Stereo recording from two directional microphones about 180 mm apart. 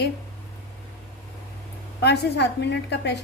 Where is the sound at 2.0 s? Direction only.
70° left (ahead or behind).